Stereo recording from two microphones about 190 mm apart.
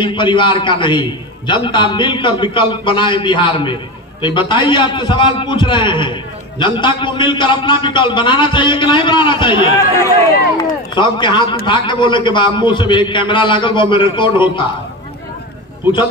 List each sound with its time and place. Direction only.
0.0 s a man's voice: 25° left (ahead or behind)
10.6 s a man's voice: 25° left (ahead or behind)